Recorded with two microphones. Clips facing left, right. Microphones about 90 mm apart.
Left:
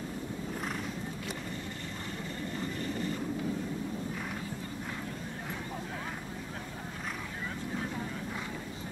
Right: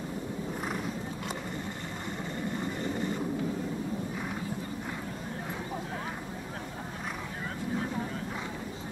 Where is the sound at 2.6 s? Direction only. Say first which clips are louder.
Right 1 dB; 15° right (ahead or behind).